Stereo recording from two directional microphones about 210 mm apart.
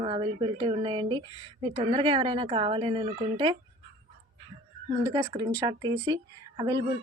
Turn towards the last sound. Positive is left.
turn(degrees=-20)  # may be behind; listen again after turning